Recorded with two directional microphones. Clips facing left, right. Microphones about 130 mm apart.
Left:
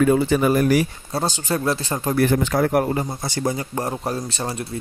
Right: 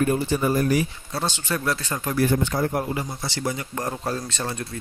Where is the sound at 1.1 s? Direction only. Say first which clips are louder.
Left 5 dB; 40° left (ahead or behind).